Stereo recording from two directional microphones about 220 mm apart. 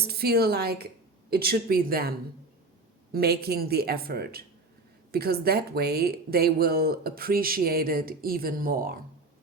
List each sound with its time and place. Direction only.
0.1 s speech: 45° right (ahead or behind)